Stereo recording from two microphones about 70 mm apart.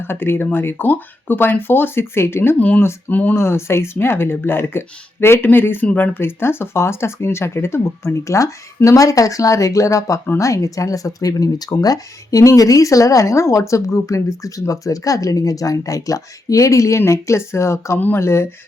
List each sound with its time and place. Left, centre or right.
0.0 s speech: left
2.6 s speech: left
3.3 s speech: left